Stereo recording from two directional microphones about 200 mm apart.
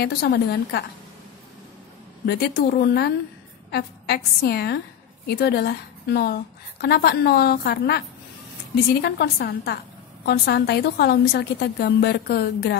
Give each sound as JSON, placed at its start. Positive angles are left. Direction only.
{"t": 0.0, "sound": "a woman's voice", "side_deg": 55}
{"t": 2.2, "sound": "a woman's voice", "side_deg": 50}
{"t": 9.0, "sound": "a woman's voice", "side_deg": 50}